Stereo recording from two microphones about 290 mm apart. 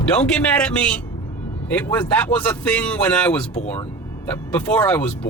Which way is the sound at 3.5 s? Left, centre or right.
Left.